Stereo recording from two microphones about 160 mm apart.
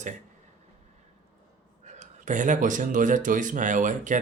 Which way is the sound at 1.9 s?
50° right (ahead or behind).